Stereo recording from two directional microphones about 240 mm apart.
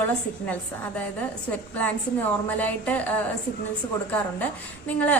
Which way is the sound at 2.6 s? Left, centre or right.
Centre.